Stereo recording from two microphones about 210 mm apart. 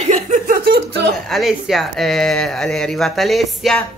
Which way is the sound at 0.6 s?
50° right (ahead or behind).